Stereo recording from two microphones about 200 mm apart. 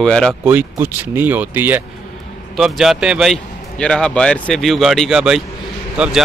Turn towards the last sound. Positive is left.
turn(degrees=-5)  # may be behind; listen again after turning